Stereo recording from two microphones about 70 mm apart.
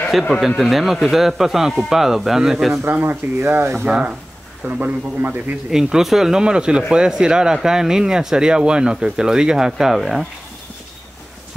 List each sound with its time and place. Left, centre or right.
0.1 s speech: centre
2.7 s a man's voice: right
3.8 s a man's voice: centre
5.7 s speech: centre